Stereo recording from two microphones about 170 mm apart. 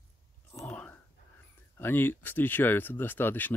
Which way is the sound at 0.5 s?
10° left (ahead or behind).